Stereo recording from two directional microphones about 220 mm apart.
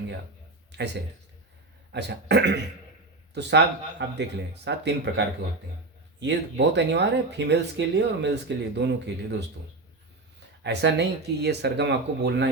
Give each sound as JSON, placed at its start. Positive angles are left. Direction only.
{"t": 1.9, "sound": "speech", "side_deg": -50}
{"t": 10.6, "sound": "speech", "side_deg": -50}